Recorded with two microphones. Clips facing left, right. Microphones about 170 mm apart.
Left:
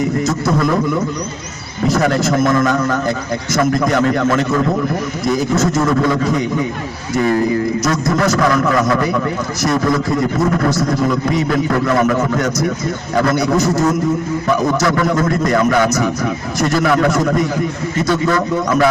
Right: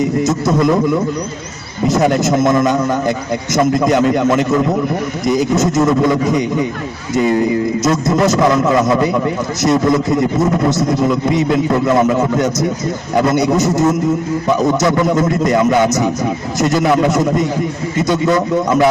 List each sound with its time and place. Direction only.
0.0 s a man's voice: 20° right (ahead or behind)
1.9 s a man's voice: 20° right (ahead or behind)